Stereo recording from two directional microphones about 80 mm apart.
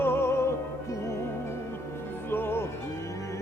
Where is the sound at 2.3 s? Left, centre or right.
Left.